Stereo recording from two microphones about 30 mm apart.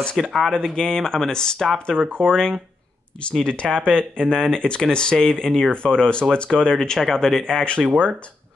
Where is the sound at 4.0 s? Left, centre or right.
Left.